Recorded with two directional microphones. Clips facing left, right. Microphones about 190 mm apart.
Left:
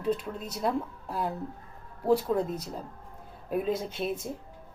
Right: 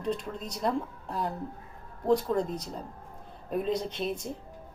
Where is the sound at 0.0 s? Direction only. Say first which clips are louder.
Left 2 dB; 5° left (ahead or behind).